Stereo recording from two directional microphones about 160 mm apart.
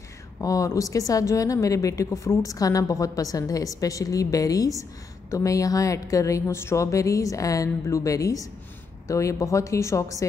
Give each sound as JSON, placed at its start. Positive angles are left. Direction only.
{"t": 0.4, "sound": "a woman's voice", "side_deg": 20}